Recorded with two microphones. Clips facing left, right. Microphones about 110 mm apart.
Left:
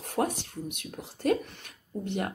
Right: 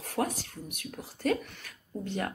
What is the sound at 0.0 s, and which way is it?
Speech, 25° left (ahead or behind).